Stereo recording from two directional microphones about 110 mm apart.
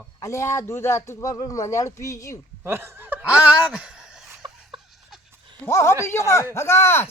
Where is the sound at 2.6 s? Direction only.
20° right (ahead or behind); by 4.3 s 5° right (ahead or behind).